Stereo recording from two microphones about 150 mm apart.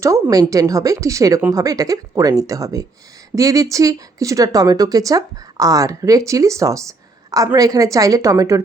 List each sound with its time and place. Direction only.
0.0 s a woman's voice: 20° right (ahead or behind)